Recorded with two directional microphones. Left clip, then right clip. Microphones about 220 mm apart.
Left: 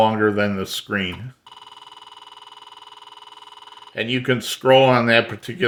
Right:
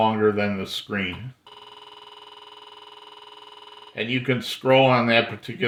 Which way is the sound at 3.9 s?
40° left (ahead or behind).